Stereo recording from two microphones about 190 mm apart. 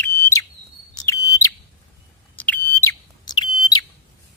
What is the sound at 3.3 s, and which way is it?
Bird, 20° left (ahead or behind).